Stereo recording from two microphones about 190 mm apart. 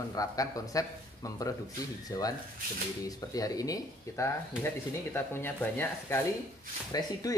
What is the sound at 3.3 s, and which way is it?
Speech, 20° left (ahead or behind).